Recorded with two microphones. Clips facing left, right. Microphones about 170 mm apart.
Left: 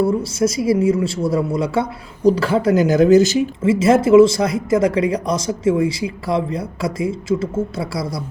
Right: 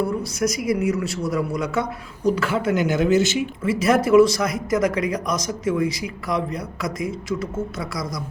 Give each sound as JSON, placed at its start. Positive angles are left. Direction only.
{"t": 0.0, "sound": "speech", "side_deg": 30}
{"t": 3.6, "sound": "speech", "side_deg": 25}